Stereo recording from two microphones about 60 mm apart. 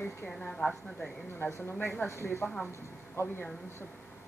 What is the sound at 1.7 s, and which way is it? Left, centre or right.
Speech, left.